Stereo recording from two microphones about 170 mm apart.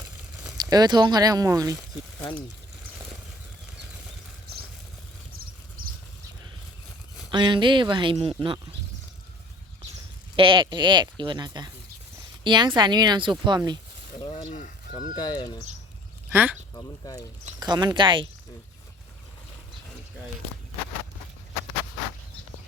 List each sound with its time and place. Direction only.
0.5 s speech: 25° right (ahead or behind)
7.3 s speech: 25° right (ahead or behind)
10.3 s speech: 30° right (ahead or behind)
14.9 s speech: 25° left (ahead or behind)
16.3 s speech: 10° right (ahead or behind)
17.6 s speech: 20° right (ahead or behind)